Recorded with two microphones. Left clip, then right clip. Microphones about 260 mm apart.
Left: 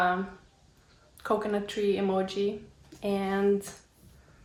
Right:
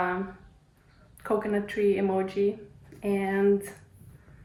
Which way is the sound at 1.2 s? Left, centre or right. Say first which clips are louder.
Right 1 dB; centre.